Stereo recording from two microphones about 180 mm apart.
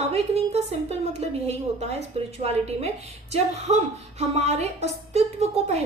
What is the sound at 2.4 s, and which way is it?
Speech, 35° right (ahead or behind).